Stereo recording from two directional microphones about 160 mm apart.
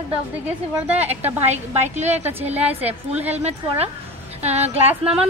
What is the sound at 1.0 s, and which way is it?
Speech, 10° right (ahead or behind).